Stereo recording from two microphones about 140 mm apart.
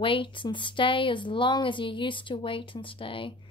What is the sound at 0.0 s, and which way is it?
Speech, 35° left (ahead or behind).